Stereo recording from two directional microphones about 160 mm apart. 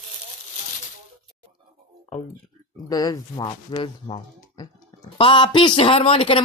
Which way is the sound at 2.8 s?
20° left (ahead or behind).